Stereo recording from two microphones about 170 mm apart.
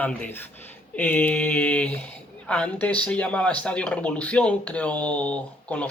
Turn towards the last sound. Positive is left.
turn(degrees=10)  # may be behind; listen again after turning